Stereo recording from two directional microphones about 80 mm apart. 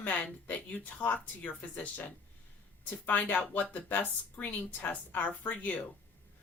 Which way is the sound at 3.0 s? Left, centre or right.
Centre.